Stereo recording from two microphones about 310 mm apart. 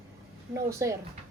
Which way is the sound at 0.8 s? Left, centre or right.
Centre.